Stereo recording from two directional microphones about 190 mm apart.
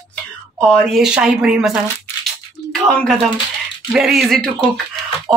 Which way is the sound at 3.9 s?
Centre (ahead or behind).